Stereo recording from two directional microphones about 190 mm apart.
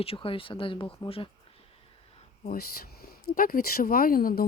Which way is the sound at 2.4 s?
50° left (ahead or behind).